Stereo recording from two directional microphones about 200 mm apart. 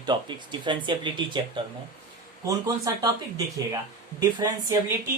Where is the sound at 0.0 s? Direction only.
20° right (ahead or behind).